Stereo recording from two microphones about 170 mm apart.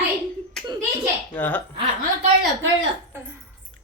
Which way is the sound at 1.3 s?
10° left (ahead or behind).